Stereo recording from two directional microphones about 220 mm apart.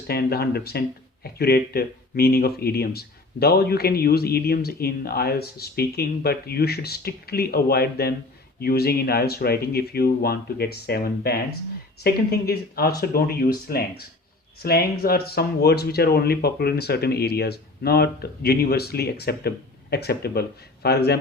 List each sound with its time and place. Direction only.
0.1 s speech: 45° left (ahead or behind)